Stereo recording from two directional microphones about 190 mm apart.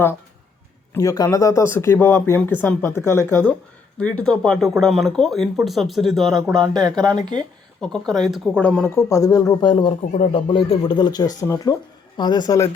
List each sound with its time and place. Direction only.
0.9 s speech: 20° left (ahead or behind); by 6.3 s centre (ahead or behind)
6.6 s speech: 20° right (ahead or behind)
7.8 s speech: 5° left (ahead or behind)